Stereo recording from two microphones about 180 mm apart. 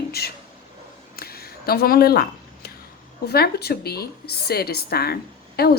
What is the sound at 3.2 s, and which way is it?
A woman's voice, 60° left (ahead or behind).